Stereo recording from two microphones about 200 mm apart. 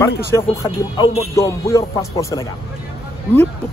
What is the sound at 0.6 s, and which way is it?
A man's voice, 25° left (ahead or behind).